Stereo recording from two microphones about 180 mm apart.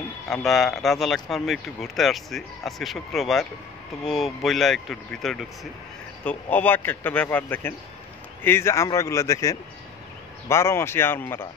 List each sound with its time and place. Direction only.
0.3 s speech: centre (ahead or behind)